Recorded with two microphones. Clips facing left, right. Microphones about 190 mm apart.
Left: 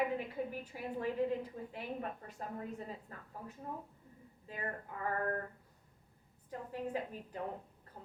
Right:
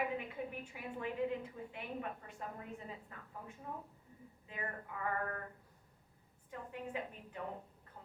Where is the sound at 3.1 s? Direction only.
40° left (ahead or behind).